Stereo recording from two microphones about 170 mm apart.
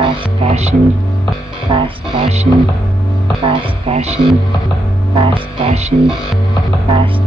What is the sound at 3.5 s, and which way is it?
Speech, 30° right (ahead or behind).